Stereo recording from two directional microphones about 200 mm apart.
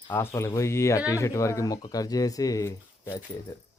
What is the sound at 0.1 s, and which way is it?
Speech, 10° left (ahead or behind).